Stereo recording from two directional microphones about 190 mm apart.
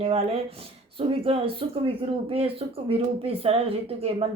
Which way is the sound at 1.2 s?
30° right (ahead or behind).